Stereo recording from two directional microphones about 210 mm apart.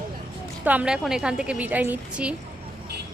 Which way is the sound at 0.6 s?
5° right (ahead or behind).